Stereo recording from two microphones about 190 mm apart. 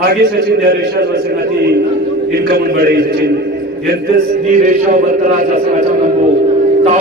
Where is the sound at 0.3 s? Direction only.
55° right (ahead or behind).